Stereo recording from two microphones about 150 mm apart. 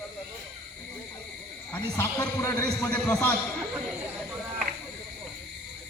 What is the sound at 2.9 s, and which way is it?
Speech, 10° left (ahead or behind).